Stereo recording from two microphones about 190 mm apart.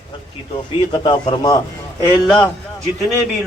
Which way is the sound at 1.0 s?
25° left (ahead or behind).